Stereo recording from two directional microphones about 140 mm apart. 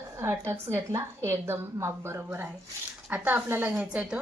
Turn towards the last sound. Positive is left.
turn(degrees=-10)  # may be behind; listen again after turning